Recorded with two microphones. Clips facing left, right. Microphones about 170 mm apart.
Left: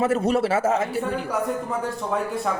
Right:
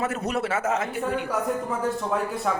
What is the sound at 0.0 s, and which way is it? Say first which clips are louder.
A man's voice: left 6 dB; 30° left (ahead or behind).